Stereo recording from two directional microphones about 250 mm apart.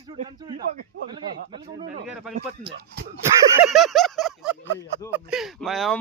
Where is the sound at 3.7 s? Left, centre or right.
Centre.